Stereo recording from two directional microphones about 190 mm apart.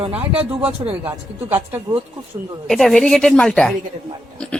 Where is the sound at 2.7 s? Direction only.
Centre (ahead or behind).